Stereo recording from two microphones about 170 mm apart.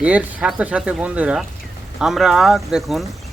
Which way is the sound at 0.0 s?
10° right (ahead or behind).